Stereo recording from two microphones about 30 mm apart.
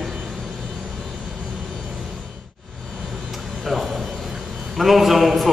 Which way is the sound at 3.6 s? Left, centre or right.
Centre.